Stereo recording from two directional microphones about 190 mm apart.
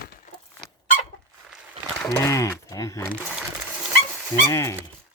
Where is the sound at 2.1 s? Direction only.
15° left (ahead or behind).